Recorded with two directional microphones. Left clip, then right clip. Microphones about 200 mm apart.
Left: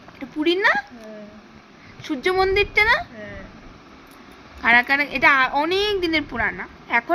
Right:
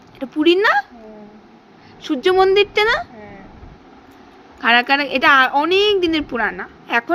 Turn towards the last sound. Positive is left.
turn(degrees=-15)  # may be behind; listen again after turning